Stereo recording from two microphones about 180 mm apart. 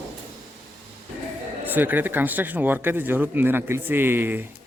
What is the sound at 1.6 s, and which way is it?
Speech, 10° right (ahead or behind).